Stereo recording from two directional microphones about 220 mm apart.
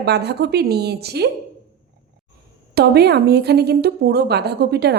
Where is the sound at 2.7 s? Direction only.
45° right (ahead or behind).